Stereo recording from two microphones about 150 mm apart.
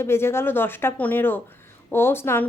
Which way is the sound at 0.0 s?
15° left (ahead or behind).